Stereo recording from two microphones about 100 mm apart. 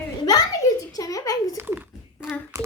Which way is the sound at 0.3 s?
35° left (ahead or behind).